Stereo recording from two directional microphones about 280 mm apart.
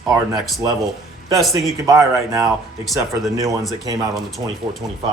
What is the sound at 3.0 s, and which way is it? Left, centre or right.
Speech, centre.